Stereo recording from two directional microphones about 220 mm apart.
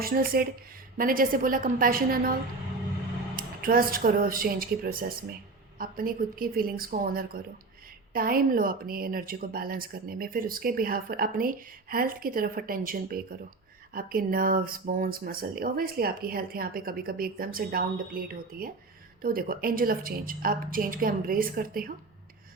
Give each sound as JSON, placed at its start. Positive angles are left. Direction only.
{"t": 0.0, "sound": "a woman's voice", "side_deg": -40}
{"t": 3.3, "sound": "a woman's voice", "side_deg": -40}